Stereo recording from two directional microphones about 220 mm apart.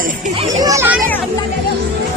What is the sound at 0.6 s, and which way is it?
Speech, 10° right (ahead or behind).